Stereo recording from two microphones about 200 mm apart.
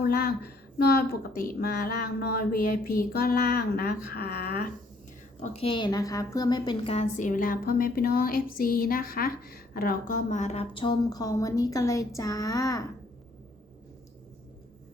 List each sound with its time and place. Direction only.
0.0 s speech: 50° left (ahead or behind)
5.4 s a woman's voice: 30° left (ahead or behind)